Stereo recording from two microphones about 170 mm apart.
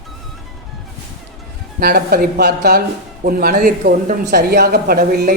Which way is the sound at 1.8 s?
65° right (ahead or behind).